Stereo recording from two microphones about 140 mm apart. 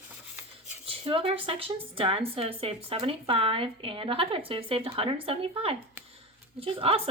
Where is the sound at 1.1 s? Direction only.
40° right (ahead or behind).